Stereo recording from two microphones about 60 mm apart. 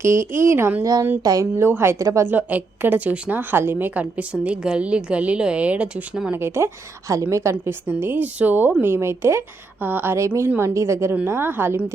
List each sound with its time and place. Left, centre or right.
0.0 s speech: right
1.2 s speech: right
1.5 s speech: right
2.0 s a woman's voice: right
2.2 s a woman's voice: right
6.3 s speech: right
7.1 s a woman's voice: right
7.9 s speech: right
8.8 s speech: right
9.8 s speech: right
10.2 s speech: right